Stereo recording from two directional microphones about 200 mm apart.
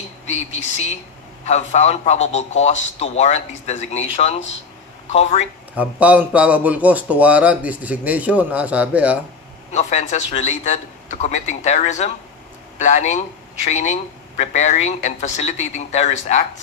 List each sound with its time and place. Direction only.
0.3 s a man's voice: 35° left (ahead or behind)
5.1 s a man's voice: 30° left (ahead or behind)
5.8 s speech: 5° right (ahead or behind)
9.7 s a man's voice: 35° left (ahead or behind)